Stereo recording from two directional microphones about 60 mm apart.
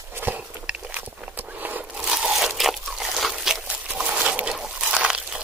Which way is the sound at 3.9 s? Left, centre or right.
Right.